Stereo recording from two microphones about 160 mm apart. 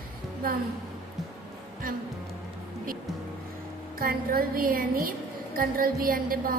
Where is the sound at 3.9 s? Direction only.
70° right (ahead or behind).